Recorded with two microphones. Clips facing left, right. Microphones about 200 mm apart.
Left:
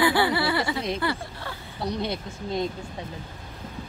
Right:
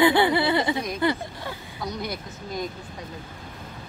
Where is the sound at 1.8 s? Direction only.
25° left (ahead or behind).